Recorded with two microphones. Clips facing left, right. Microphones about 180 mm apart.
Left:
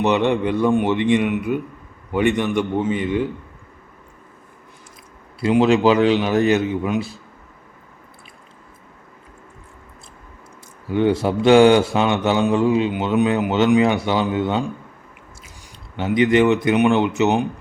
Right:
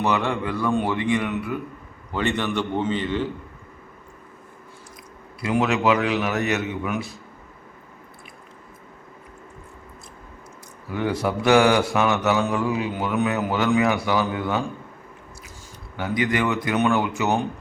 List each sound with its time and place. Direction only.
0.0 s mantra: 20° left (ahead or behind)
2.1 s a man's voice: 15° left (ahead or behind)
5.4 s mantra: 30° left (ahead or behind)
10.9 s mantra: 25° left (ahead or behind)
16.0 s mantra: 25° left (ahead or behind)